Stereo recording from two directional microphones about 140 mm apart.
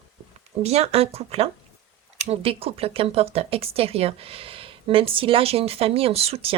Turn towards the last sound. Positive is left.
turn(degrees=-45)  # may be behind; listen again after turning